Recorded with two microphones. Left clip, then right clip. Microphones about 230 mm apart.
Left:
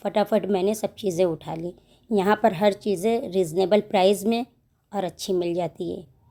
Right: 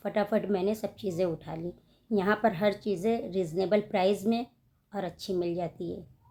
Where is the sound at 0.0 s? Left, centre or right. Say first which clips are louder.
Left 6 dB; left.